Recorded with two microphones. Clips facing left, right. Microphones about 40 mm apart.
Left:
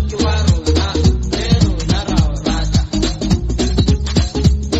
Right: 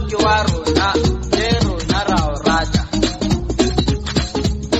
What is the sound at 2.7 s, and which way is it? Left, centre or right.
Music, right.